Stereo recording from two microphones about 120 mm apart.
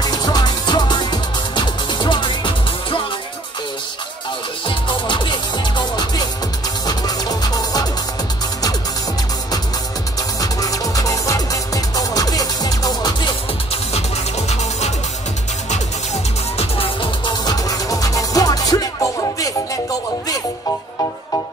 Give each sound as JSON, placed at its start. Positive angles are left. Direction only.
{"t": 0.0, "sound": "music", "side_deg": 35}
{"t": 4.6, "sound": "music", "side_deg": 40}
{"t": 10.4, "sound": "music", "side_deg": 30}
{"t": 14.5, "sound": "music", "side_deg": 65}
{"t": 16.5, "sound": "music", "side_deg": 50}
{"t": 17.5, "sound": "music", "side_deg": 30}